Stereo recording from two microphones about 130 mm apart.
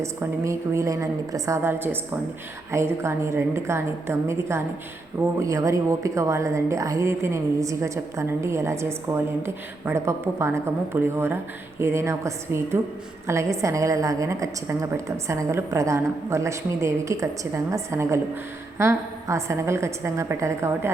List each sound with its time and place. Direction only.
0.0 s a woman's voice: 20° right (ahead or behind)